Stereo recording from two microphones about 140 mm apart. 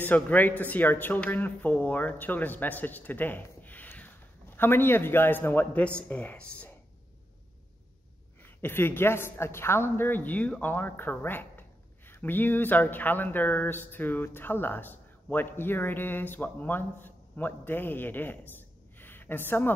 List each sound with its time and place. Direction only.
0.0 s speech: 10° left (ahead or behind)
8.5 s speech: 15° left (ahead or behind)